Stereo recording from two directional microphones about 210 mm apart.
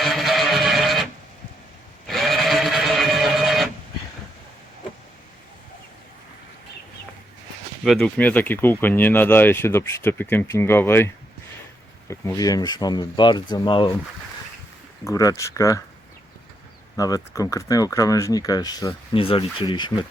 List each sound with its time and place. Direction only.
0.0 s music: centre (ahead or behind)
2.0 s printer: centre (ahead or behind)
7.9 s speech: centre (ahead or behind); by 13.9 s 25° left (ahead or behind)
15.0 s speech: 15° left (ahead or behind)
17.0 s speech: 15° left (ahead or behind)